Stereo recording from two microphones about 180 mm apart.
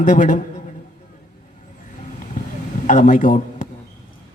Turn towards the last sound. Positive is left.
turn(degrees=45)  # may be behind; listen again after turning